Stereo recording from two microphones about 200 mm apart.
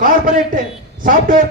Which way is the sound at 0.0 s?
45° right (ahead or behind).